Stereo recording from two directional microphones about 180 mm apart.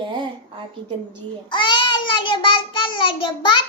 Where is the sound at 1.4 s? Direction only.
25° left (ahead or behind).